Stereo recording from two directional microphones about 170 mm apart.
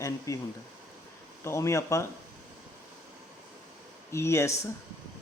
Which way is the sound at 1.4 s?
15° left (ahead or behind).